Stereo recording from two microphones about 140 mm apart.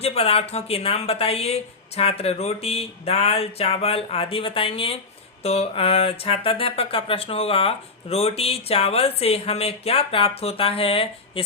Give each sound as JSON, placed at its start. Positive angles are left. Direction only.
{"t": 0.0, "sound": "speech", "side_deg": 45}